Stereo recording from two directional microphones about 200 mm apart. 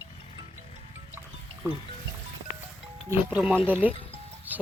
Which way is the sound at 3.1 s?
5° right (ahead or behind).